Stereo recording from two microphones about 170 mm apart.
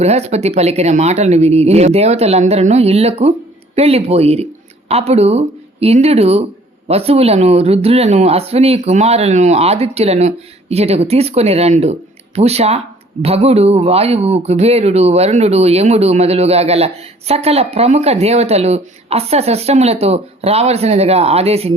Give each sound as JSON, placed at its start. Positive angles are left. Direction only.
{"t": 0.0, "sound": "a man's voice", "side_deg": -40}